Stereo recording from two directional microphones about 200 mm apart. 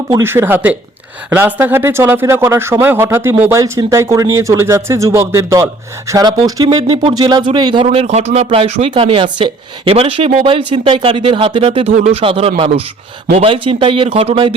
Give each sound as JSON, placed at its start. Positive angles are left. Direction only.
{"t": 0.1, "sound": "speech", "side_deg": -10}